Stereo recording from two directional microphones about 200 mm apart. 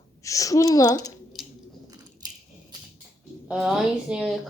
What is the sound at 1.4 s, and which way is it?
Biting, centre (ahead or behind).